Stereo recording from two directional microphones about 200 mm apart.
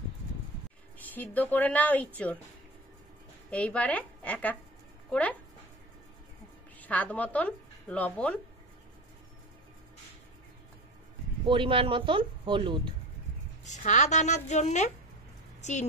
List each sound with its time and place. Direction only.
0.9 s speech: 10° left (ahead or behind)
3.4 s speech: 5° left (ahead or behind)
6.8 s speech: 5° left (ahead or behind)
11.4 s speech: 25° right (ahead or behind)
13.7 s a woman's voice: 35° left (ahead or behind)